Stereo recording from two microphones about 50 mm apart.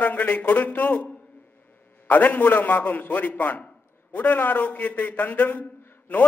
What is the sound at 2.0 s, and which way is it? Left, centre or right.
A man's voice, left.